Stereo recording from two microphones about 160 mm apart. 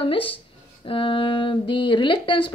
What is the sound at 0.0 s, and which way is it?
Speech, 35° left (ahead or behind).